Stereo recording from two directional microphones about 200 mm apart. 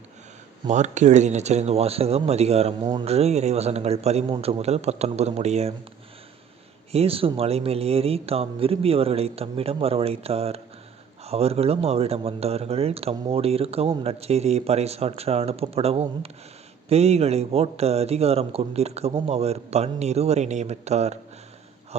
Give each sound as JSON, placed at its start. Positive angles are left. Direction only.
{"t": 0.7, "sound": "speech", "side_deg": -35}
{"t": 6.9, "sound": "speech", "side_deg": -30}